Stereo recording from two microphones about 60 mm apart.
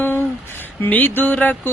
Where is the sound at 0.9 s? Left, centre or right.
Left.